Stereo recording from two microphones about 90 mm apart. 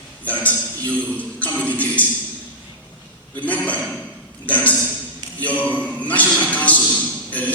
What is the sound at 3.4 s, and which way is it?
Speech, 15° left (ahead or behind).